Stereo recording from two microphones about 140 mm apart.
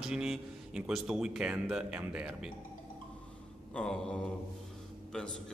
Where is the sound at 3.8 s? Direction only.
5° left (ahead or behind).